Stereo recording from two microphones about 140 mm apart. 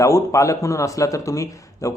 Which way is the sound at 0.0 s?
20° left (ahead or behind).